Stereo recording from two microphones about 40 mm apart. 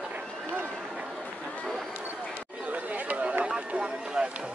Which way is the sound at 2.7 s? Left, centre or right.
Right.